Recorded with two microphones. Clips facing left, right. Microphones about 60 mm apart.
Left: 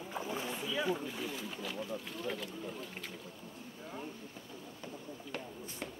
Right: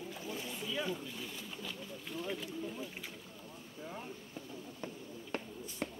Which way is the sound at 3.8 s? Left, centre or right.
Centre.